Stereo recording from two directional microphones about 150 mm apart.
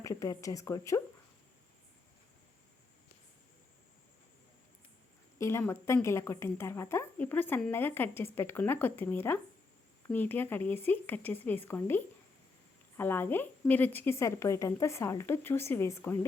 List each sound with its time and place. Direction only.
0.0 s a woman's voice: 20° left (ahead or behind)
5.4 s a woman's voice: 15° left (ahead or behind)